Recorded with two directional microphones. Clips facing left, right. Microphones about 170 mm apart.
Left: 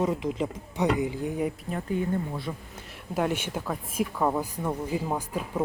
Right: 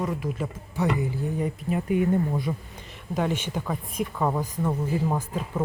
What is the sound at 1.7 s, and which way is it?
Speech, 15° right (ahead or behind).